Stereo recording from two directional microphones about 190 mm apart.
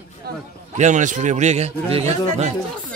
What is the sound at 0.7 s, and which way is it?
A man's voice, 40° right (ahead or behind).